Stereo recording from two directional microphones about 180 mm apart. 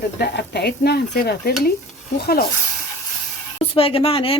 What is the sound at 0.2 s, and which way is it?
Stir, 70° left (ahead or behind).